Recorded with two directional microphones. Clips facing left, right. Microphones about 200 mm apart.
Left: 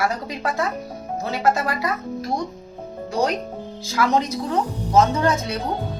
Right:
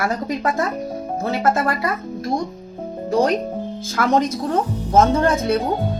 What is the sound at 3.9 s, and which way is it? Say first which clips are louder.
Speech: right 2 dB; 50° right (ahead or behind).